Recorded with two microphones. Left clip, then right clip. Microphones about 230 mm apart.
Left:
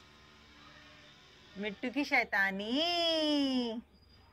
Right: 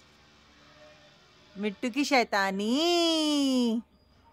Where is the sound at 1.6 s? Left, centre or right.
Right.